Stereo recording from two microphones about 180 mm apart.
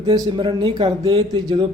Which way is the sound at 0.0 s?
25° right (ahead or behind).